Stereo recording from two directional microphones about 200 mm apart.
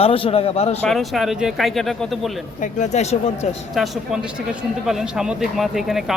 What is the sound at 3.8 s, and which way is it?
A man's voice, 5° right (ahead or behind).